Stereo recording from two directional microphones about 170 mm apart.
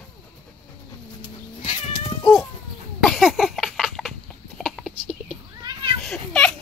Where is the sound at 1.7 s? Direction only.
40° left (ahead or behind).